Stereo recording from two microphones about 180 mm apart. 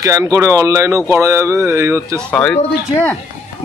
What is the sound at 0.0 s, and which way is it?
Speech, 20° right (ahead or behind).